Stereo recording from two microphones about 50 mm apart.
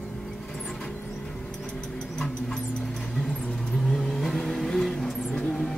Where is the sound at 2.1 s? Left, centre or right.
Centre.